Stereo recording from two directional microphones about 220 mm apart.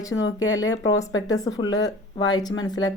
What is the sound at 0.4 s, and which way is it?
Speech, 60° left (ahead or behind).